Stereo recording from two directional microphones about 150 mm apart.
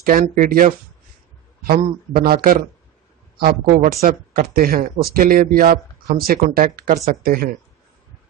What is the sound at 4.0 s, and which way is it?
Speech, 70° right (ahead or behind).